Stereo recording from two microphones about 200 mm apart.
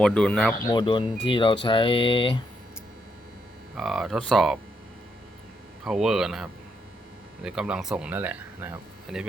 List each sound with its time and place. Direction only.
0.0 s speech: 5° left (ahead or behind)
0.6 s speech: 20° left (ahead or behind)
3.8 s speech: centre (ahead or behind)
5.8 s speech: centre (ahead or behind)